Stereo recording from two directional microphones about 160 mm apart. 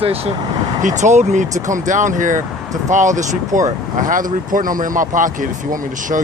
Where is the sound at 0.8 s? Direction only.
50° right (ahead or behind).